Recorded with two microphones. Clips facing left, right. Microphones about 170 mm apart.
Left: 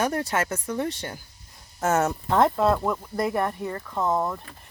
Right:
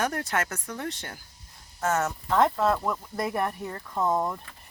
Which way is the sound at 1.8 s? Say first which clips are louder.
Left 4 dB; 25° left (ahead or behind).